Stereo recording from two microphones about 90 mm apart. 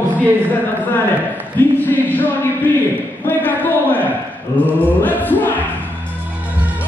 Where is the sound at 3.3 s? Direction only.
20° left (ahead or behind).